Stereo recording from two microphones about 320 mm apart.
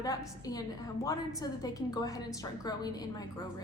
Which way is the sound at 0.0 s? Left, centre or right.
Centre.